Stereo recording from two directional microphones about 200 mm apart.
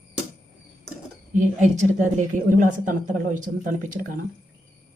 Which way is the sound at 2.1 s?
40° right (ahead or behind).